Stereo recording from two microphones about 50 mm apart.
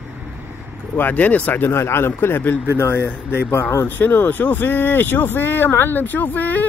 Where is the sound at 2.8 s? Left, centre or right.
Left.